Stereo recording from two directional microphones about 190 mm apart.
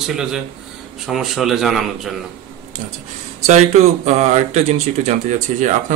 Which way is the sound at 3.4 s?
35° right (ahead or behind).